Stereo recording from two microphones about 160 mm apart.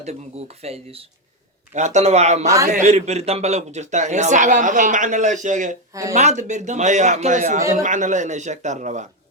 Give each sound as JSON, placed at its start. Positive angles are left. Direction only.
{"t": 0.0, "sound": "a man's voice", "side_deg": -40}
{"t": 5.9, "sound": "speech", "side_deg": -20}
{"t": 6.1, "sound": "a man's voice", "side_deg": -45}